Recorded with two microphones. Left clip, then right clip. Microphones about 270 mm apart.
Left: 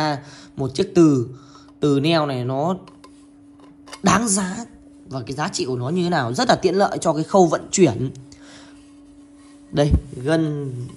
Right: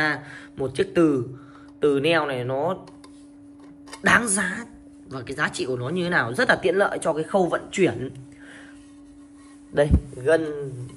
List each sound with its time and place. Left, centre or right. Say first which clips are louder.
0.0 s speech: left 1 dB; centre
4.0 s speech: even; centre
10.2 s speech: even; left